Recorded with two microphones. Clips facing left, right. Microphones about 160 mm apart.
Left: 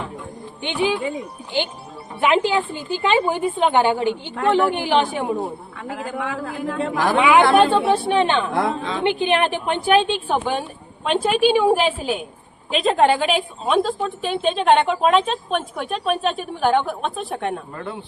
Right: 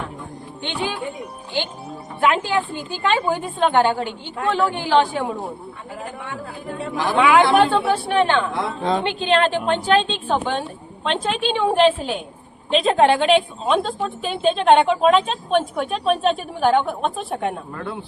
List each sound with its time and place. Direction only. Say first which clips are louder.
0.6 s a woman's voice: left 5 dB; 15° left (ahead or behind)
2.2 s a woman's voice: left 1 dB; 15° left (ahead or behind)
5.9 s a woman's voice: left 6 dB; 90° left
7.2 s a woman's voice: even; 20° left (ahead or behind); by 17.9 s centre (ahead or behind)